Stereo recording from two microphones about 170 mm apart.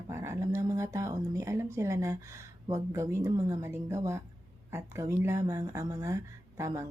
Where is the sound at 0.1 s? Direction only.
15° right (ahead or behind).